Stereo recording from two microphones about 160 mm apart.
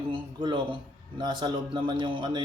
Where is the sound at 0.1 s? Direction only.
30° right (ahead or behind).